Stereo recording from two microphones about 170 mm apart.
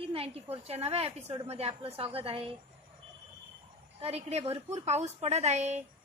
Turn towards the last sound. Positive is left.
turn(degrees=-40)  # may be behind; listen again after turning